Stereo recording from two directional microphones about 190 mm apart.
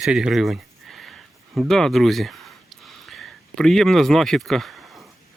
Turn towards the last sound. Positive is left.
turn(degrees=0)  # may be behind; listen again after turning